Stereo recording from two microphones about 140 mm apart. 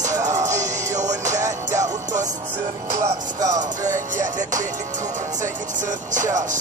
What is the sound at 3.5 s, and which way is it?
Music, 60° right (ahead or behind).